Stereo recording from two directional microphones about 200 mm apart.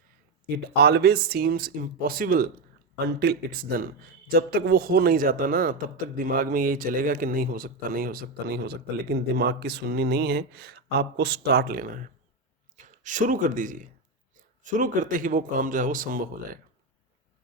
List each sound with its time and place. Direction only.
0.4 s a man's voice: 55° right (ahead or behind)